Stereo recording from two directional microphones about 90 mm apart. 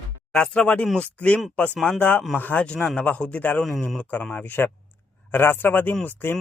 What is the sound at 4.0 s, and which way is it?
A man's voice, 15° left (ahead or behind).